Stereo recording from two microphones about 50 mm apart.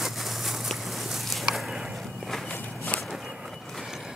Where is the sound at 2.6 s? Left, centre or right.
Left.